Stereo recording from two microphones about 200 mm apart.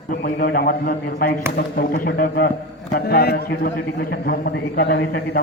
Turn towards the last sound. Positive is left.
turn(degrees=50)  # may be behind; listen again after turning